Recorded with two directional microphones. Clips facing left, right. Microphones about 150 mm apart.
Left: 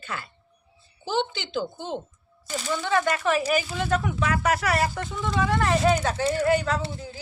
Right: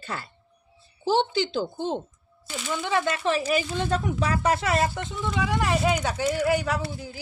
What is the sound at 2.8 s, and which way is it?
Speech, 15° right (ahead or behind).